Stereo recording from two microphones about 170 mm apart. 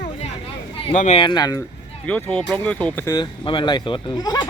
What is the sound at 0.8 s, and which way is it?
Speech, 40° left (ahead or behind).